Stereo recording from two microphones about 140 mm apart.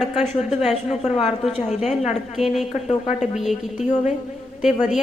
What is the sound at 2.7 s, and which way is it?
Speech, 55° left (ahead or behind).